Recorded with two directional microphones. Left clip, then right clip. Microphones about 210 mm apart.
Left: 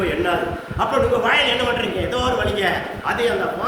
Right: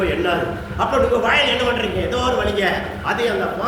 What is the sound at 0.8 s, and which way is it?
A man's voice, 20° left (ahead or behind).